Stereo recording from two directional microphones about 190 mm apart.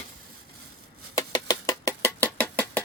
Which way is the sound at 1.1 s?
15° left (ahead or behind).